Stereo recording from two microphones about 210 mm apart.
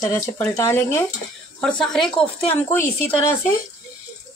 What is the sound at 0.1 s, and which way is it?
Speech, 15° left (ahead or behind).